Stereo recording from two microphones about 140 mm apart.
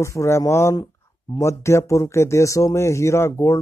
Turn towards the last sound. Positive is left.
turn(degrees=20)  # may be behind; listen again after turning